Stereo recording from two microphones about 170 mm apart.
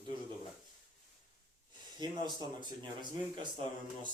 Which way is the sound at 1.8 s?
25° right (ahead or behind).